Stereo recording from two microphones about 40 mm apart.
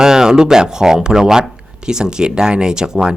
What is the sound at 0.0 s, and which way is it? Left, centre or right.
Speech, centre.